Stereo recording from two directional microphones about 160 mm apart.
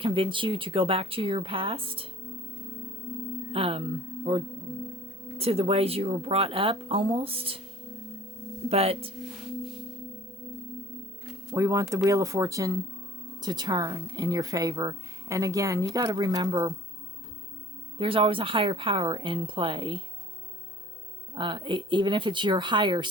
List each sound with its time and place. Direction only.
0.0 s speech: 30° right (ahead or behind)
3.5 s speech: 35° right (ahead or behind)
8.7 s speech: 40° right (ahead or behind)
11.5 s speech: 20° right (ahead or behind)
17.9 s speech: 35° right (ahead or behind)
21.3 s speech: 30° right (ahead or behind)